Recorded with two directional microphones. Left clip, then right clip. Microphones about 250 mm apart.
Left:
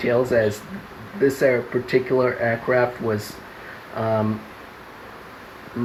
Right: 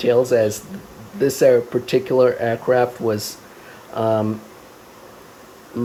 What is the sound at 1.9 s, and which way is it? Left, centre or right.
Speech, right.